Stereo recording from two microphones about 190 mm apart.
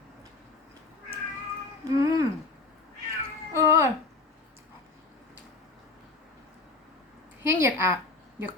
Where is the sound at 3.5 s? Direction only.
15° right (ahead or behind).